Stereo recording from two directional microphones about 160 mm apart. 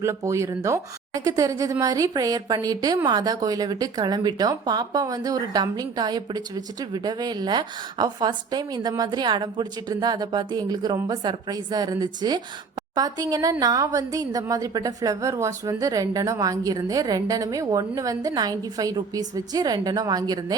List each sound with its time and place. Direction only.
0.0 s speech: 20° right (ahead or behind)